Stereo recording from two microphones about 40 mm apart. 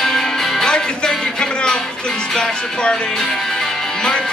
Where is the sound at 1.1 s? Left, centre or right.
Centre.